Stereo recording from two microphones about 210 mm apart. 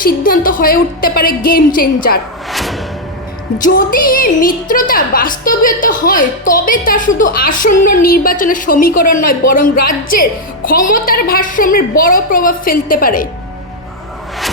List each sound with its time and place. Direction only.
0.0 s a woman's voice: 40° left (ahead or behind)
2.5 s music: centre (ahead or behind)
3.6 s a woman's voice: 40° left (ahead or behind)